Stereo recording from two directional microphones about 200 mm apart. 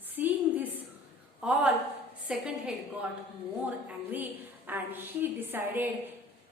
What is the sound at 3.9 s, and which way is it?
A woman's voice, 10° right (ahead or behind).